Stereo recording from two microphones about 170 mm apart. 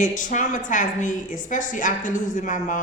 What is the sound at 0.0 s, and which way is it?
A woman's voice, 50° left (ahead or behind).